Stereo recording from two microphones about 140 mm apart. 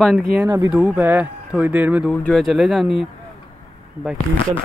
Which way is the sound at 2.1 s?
Centre (ahead or behind).